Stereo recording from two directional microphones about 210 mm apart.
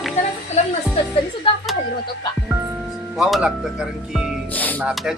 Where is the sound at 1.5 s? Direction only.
25° left (ahead or behind).